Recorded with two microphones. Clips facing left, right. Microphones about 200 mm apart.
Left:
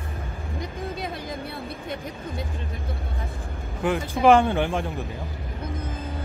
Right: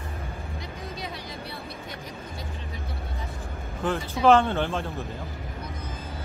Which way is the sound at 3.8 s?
10° left (ahead or behind).